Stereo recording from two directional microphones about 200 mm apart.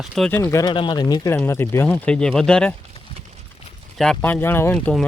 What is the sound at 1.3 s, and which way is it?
Speech, 10° left (ahead or behind).